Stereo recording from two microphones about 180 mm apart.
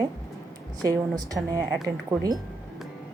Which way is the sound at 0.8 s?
20° right (ahead or behind).